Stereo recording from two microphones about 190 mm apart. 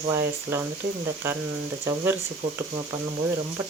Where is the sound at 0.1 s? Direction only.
15° right (ahead or behind).